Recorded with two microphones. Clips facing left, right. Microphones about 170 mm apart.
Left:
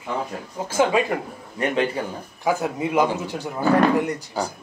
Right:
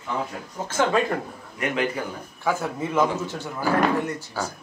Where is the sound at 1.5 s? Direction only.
30° left (ahead or behind).